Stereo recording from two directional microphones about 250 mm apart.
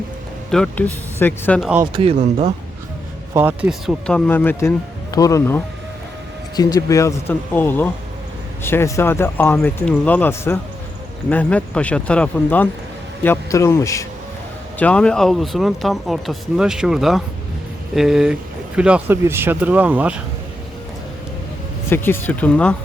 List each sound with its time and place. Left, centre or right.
0.5 s speech: centre
1.8 s speech: right
3.3 s speech: centre
21.8 s speech: centre